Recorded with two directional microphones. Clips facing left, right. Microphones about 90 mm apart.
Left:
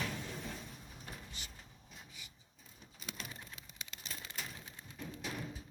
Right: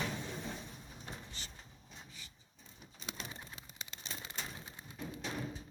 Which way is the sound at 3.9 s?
30° right (ahead or behind).